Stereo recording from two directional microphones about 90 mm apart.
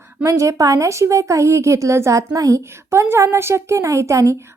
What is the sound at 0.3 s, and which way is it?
Speech, 35° right (ahead or behind).